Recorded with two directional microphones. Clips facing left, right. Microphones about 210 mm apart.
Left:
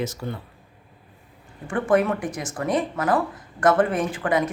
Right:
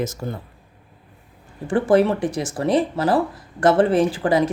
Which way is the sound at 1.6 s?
30° right (ahead or behind).